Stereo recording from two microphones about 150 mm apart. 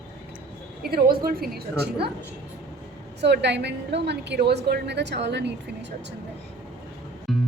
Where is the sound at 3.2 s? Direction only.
90° right.